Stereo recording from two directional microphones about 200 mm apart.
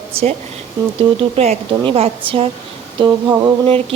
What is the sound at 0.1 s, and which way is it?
Speech, 30° right (ahead or behind).